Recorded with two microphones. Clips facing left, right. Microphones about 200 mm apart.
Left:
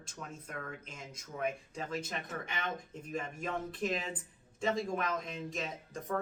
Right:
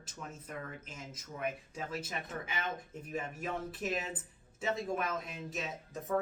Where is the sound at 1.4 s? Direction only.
5° right (ahead or behind).